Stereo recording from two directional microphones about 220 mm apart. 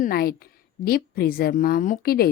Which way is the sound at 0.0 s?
45° left (ahead or behind).